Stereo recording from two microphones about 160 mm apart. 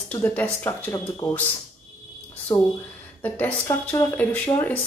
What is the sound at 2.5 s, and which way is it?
Speech, 20° left (ahead or behind).